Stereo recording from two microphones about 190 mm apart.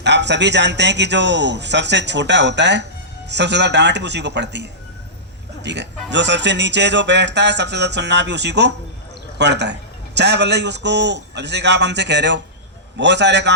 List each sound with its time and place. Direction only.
0.0 s speech: 65° right (ahead or behind)